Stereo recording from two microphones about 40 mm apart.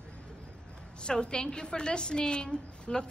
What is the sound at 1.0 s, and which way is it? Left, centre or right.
A woman's voice, left.